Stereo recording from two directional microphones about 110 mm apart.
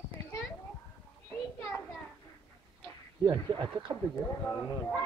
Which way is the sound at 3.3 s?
40° right (ahead or behind).